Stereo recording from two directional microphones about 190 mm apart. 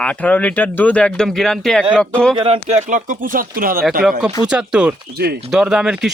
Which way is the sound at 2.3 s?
30° right (ahead or behind).